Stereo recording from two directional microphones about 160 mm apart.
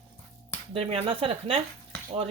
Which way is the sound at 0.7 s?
40° right (ahead or behind).